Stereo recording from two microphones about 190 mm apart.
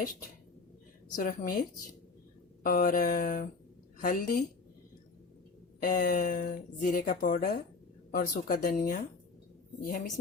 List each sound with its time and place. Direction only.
1.1 s speech: 50° left (ahead or behind)
2.6 s speech: 45° left (ahead or behind)
5.8 s speech: 45° left (ahead or behind)